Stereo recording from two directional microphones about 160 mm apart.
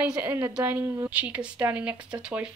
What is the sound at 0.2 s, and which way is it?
A woman's voice, 10° right (ahead or behind).